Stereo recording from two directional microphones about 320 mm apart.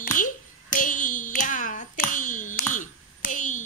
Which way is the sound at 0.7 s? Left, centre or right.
Left.